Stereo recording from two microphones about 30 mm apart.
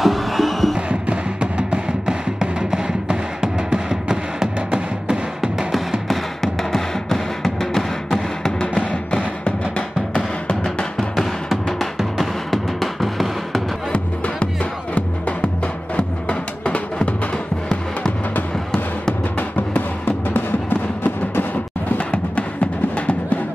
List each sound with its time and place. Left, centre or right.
0.0 s music: centre
1.1 s music: right
3.1 s music: right
4.6 s music: right
5.7 s music: centre
6.4 s music: centre
8.5 s music: left
11.0 s music: centre
13.9 s music: left
19.3 s music: left
21.9 s music: left